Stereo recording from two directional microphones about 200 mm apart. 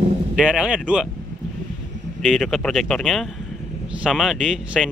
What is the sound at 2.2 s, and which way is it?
Speech, centre (ahead or behind).